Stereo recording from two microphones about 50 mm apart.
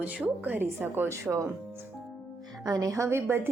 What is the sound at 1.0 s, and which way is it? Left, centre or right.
Speech, right.